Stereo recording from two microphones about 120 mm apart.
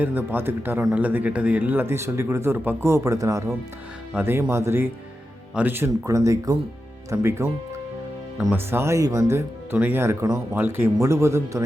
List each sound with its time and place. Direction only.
0.0 s a man's voice: 15° right (ahead or behind)
8.5 s speech: 20° right (ahead or behind)